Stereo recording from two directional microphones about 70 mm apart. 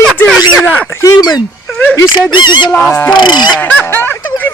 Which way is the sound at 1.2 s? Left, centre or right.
Left.